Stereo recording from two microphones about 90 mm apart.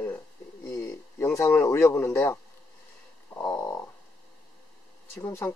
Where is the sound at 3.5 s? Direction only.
35° left (ahead or behind).